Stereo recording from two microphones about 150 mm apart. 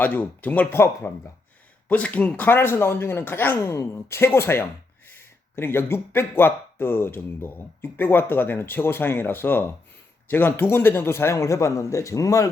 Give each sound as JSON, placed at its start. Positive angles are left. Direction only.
{"t": 0.0, "sound": "a man's voice", "side_deg": 10}